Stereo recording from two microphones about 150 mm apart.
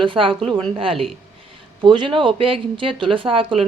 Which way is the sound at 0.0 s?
35° right (ahead or behind).